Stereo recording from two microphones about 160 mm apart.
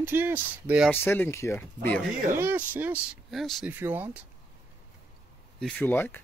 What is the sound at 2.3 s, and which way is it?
Speech, 10° right (ahead or behind).